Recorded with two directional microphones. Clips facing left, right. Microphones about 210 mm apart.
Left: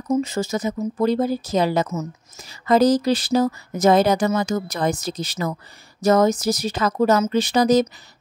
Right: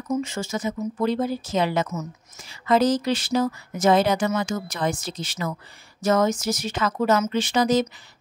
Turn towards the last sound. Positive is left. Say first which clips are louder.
# left 4 dB
turn(degrees=40)  # may be behind; listen again after turning